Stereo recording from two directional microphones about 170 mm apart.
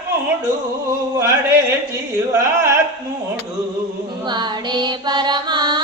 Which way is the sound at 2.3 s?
15° right (ahead or behind).